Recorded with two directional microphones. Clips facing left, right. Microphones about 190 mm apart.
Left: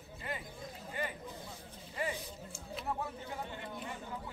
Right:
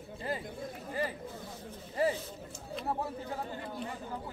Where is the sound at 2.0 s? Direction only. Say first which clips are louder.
Right 8 dB; 35° right (ahead or behind).